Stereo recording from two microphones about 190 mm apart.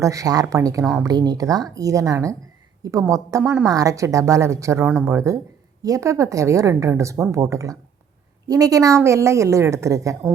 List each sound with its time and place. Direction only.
0.0 s a woman's voice: 15° right (ahead or behind)